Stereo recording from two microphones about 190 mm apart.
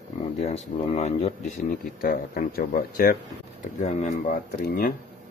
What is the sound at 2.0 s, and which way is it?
Speech, 50° left (ahead or behind).